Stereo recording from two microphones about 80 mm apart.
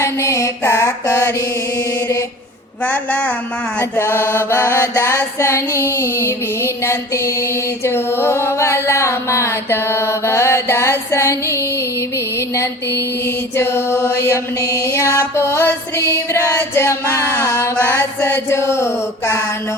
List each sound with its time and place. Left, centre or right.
0.0 s mantra: left
2.8 s a woman's voice: centre
3.8 s female singing: left
7.9 s music: left
12.5 s female singing: left
15.0 s music: right
15.4 s female singing: left
16.6 s female singing: left